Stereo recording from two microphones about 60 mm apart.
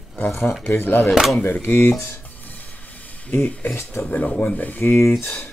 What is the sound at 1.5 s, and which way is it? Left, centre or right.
Speech, left.